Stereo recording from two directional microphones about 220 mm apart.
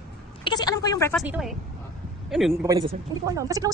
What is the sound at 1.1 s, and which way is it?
Speech, 5° right (ahead or behind).